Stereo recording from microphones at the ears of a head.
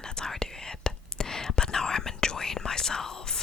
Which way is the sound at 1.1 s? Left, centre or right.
Left.